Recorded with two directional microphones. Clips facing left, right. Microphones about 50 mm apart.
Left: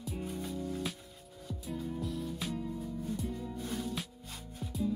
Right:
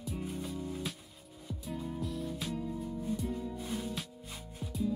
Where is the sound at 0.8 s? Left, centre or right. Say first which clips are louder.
Left 1 dB; centre.